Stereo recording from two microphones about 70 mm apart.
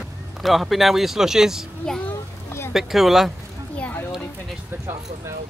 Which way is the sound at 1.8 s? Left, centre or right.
Centre.